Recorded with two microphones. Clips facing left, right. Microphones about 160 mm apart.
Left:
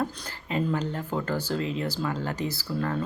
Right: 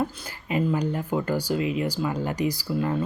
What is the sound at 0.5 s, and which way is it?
Speech, 10° right (ahead or behind).